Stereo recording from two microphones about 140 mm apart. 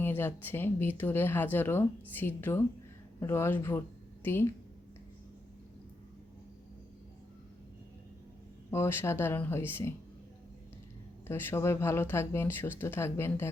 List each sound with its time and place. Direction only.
0.0 s a woman's voice: 15° left (ahead or behind)
8.7 s a woman's voice: 15° left (ahead or behind)
11.3 s a woman's voice: 15° left (ahead or behind)